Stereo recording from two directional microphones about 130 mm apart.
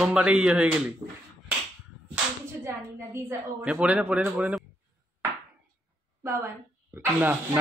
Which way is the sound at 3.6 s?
10° right (ahead or behind).